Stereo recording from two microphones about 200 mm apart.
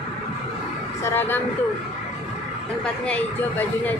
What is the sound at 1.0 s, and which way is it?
Speech, 10° left (ahead or behind).